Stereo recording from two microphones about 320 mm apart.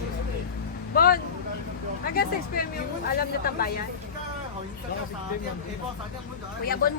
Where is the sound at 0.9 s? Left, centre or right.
Left.